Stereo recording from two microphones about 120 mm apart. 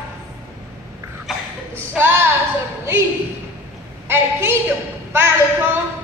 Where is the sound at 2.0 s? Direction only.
20° right (ahead or behind).